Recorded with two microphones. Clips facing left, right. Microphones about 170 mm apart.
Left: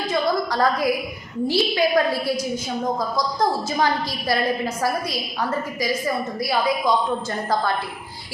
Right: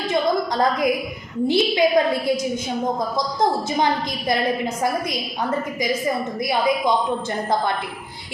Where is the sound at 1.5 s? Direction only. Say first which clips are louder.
Right 3 dB; 20° right (ahead or behind).